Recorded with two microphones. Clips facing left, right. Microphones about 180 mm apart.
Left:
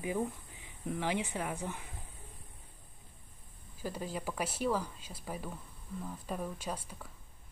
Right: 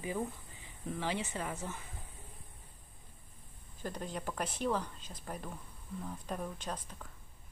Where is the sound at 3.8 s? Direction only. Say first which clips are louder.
Left 2 dB; 5° left (ahead or behind).